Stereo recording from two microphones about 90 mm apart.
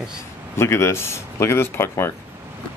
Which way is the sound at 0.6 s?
30° left (ahead or behind).